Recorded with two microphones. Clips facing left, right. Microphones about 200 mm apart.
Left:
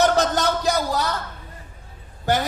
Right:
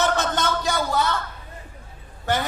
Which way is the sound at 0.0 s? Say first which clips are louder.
Left 4 dB; 40° left (ahead or behind).